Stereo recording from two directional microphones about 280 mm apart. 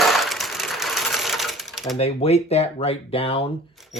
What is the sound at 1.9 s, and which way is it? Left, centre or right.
Speech, left.